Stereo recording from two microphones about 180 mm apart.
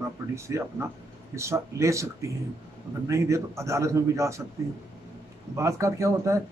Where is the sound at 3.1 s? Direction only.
15° right (ahead or behind).